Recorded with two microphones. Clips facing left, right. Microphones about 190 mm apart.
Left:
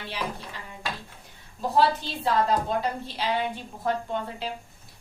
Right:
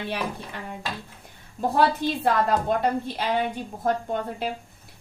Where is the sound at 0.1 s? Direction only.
60° right (ahead or behind).